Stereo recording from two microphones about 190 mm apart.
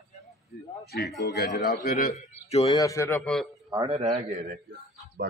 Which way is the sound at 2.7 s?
15° left (ahead or behind).